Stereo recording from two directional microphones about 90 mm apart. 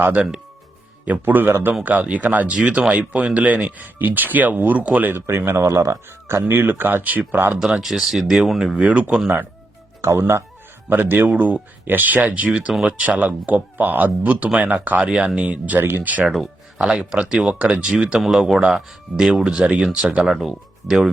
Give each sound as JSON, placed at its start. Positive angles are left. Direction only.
{"t": 0.0, "sound": "speech", "side_deg": -15}
{"t": 7.6, "sound": "speech", "side_deg": -5}
{"t": 10.0, "sound": "speech", "side_deg": -30}
{"t": 16.2, "sound": "speech", "side_deg": 0}